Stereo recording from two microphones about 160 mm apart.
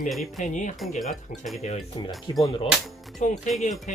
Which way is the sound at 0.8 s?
Centre (ahead or behind).